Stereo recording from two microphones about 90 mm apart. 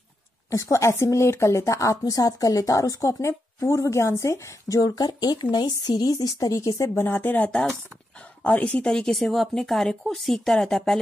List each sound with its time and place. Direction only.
0.5 s a woman's voice: 35° left (ahead or behind)
4.7 s speech: 45° left (ahead or behind)
7.1 s speech: 20° left (ahead or behind); by 11.0 s 5° left (ahead or behind)